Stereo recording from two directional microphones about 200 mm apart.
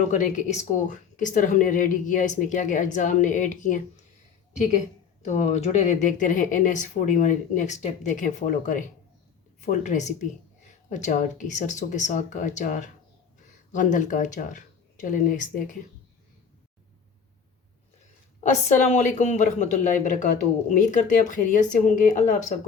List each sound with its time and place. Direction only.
0.1 s speech: 35° left (ahead or behind)
18.3 s speech: 35° left (ahead or behind)